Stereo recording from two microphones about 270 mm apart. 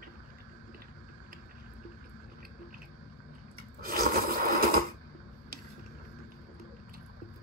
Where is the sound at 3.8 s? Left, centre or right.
Right.